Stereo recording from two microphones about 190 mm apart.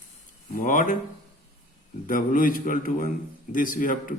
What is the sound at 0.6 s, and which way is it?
Speech, 45° left (ahead or behind).